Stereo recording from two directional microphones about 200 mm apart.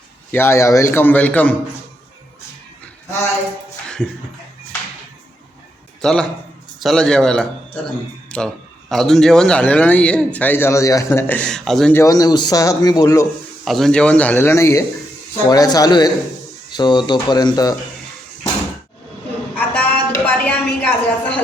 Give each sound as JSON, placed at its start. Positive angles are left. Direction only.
{"t": 0.3, "sound": "a man's voice", "side_deg": 10}
{"t": 6.0, "sound": "a man's voice", "side_deg": 5}
{"t": 12.0, "sound": "speech", "side_deg": 20}
{"t": 13.7, "sound": "a man's voice", "side_deg": 0}
{"t": 19.5, "sound": "a sound", "side_deg": 10}